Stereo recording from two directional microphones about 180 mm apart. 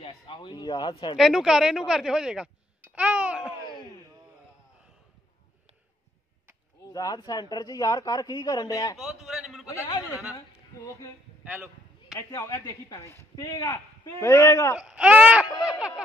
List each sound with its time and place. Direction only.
0.0 s a man's voice: 25° left (ahead or behind)
1.1 s speech: centre (ahead or behind)
3.6 s a sound: 25° left (ahead or behind)
6.9 s speech: 20° left (ahead or behind)
8.9 s a man's voice: centre (ahead or behind)
9.7 s speech: 15° left (ahead or behind)
11.4 s speech: 10° right (ahead or behind)
12.1 s speech: 15° left (ahead or behind)
14.8 s speech: 5° right (ahead or behind)